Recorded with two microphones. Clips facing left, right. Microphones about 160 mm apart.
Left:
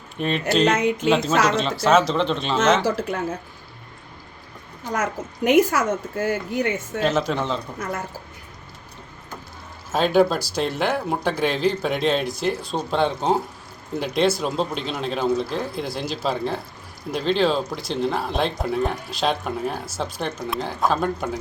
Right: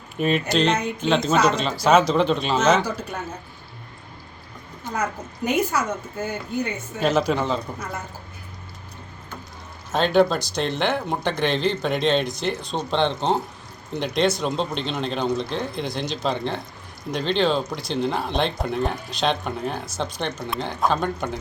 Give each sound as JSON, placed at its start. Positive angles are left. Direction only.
{"t": 0.2, "sound": "speech", "side_deg": -5}
{"t": 2.8, "sound": "speech", "side_deg": 90}
{"t": 5.5, "sound": "speech", "side_deg": 85}
{"t": 7.0, "sound": "speech", "side_deg": 0}
{"t": 9.9, "sound": "speech", "side_deg": 5}